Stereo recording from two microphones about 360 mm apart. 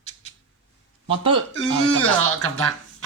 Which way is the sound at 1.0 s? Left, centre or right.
Centre.